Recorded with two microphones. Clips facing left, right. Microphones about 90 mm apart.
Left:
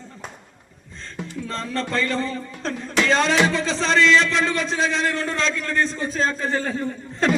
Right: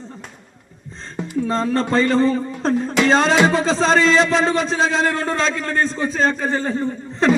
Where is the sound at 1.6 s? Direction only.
35° right (ahead or behind); by 6.5 s 50° right (ahead or behind).